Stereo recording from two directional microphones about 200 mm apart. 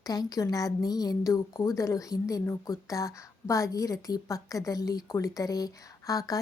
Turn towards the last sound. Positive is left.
turn(degrees=15)  # may be behind; listen again after turning